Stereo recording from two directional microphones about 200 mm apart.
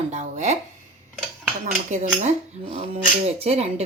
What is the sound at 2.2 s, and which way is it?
A woman's voice, 35° right (ahead or behind).